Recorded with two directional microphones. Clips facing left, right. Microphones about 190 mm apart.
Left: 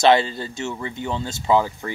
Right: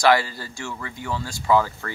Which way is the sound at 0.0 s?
25° left (ahead or behind).